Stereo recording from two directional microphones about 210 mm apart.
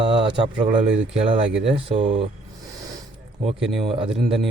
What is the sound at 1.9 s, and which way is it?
Speech, 25° right (ahead or behind).